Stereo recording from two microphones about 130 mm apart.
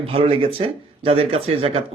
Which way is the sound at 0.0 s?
45° right (ahead or behind).